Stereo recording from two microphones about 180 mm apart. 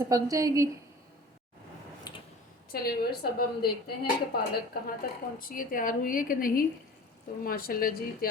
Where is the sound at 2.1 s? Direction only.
25° left (ahead or behind).